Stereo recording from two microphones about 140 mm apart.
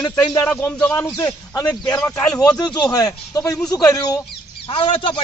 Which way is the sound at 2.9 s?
25° left (ahead or behind).